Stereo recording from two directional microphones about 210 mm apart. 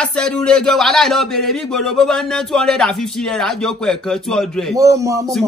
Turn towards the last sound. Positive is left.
turn(degrees=-15)  # may be behind; listen again after turning